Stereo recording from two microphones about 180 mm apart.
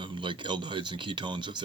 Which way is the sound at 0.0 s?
25° right (ahead or behind).